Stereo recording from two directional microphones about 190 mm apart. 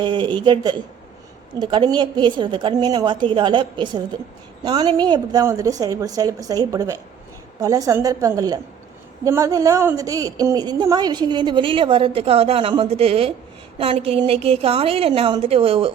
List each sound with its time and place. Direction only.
0.0 s a woman's voice: 25° right (ahead or behind)